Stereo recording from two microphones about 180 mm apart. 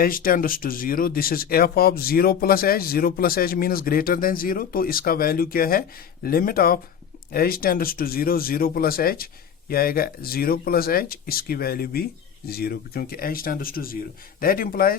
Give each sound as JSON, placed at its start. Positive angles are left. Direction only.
{"t": 0.0, "sound": "speech", "side_deg": 50}